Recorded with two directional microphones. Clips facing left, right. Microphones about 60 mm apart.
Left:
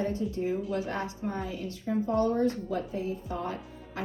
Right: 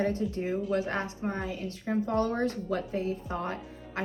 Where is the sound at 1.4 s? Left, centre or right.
Right.